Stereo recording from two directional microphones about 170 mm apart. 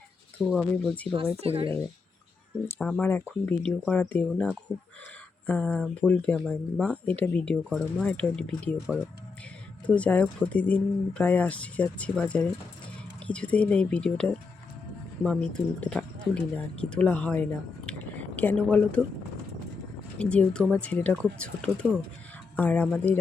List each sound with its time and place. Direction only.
0.3 s speech: 5° left (ahead or behind)
1.4 s speech: 35° right (ahead or behind)
2.6 s speech: 5° left (ahead or behind)
9.8 s speech: 5° left (ahead or behind)
17.8 s a sound: 10° left (ahead or behind)
20.1 s speech: 5° left (ahead or behind)